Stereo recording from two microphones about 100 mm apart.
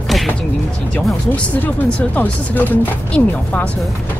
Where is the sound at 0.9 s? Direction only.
15° left (ahead or behind).